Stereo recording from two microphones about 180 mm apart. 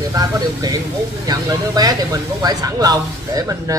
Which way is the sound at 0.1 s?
20° right (ahead or behind).